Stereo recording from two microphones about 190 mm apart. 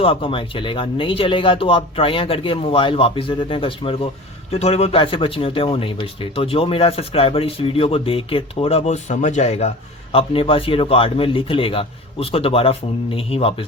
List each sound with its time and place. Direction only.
0.0 s speech: 30° left (ahead or behind)